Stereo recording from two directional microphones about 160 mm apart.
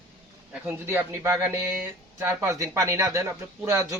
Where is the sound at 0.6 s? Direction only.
10° right (ahead or behind).